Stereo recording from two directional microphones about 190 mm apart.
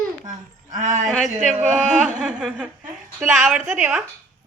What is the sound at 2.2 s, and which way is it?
A woman's voice, centre (ahead or behind).